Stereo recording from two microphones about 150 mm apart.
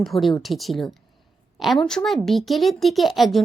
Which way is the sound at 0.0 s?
Centre (ahead or behind).